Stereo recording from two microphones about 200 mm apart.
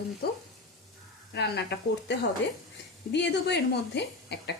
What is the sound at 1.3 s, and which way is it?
Speech, 55° left (ahead or behind).